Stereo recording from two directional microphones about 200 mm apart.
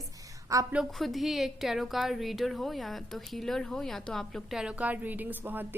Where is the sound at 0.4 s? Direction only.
15° right (ahead or behind).